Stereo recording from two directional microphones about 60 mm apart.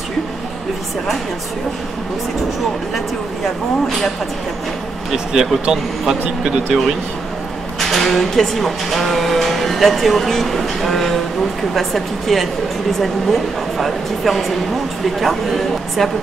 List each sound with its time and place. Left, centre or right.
5.1 s speech: centre
7.8 s speech: centre